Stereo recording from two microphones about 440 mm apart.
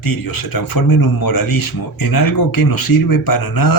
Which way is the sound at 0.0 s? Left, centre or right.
Left.